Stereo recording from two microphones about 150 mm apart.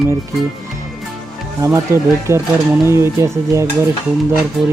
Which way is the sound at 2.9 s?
20° right (ahead or behind).